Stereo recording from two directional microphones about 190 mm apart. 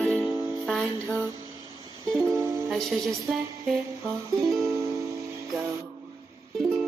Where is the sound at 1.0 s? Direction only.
15° right (ahead or behind).